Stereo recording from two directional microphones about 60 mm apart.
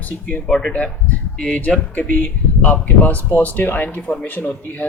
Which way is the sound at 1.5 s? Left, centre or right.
Left.